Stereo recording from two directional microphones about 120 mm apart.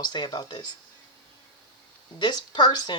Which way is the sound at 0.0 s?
40° left (ahead or behind).